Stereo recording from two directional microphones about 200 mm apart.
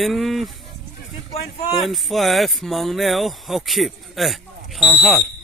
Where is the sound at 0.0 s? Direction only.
Centre (ahead or behind).